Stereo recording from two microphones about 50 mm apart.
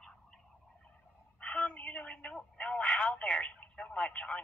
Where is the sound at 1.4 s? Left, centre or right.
Left.